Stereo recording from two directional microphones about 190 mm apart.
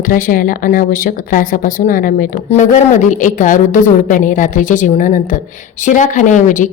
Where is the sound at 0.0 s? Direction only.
45° left (ahead or behind).